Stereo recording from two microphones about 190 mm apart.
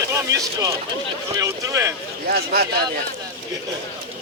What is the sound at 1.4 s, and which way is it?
Speech, 15° right (ahead or behind).